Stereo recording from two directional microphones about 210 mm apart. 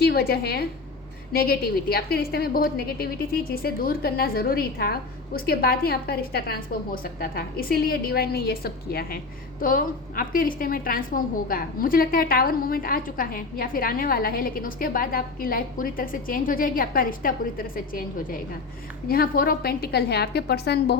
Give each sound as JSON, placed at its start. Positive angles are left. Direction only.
{"t": 0.0, "sound": "a woman's voice", "side_deg": 50}